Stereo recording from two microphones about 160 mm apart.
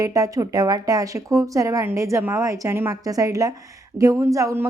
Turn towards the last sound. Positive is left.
turn(degrees=-20)  # may be behind; listen again after turning